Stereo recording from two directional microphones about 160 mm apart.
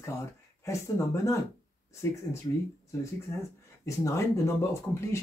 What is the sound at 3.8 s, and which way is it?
Speech, 20° left (ahead or behind).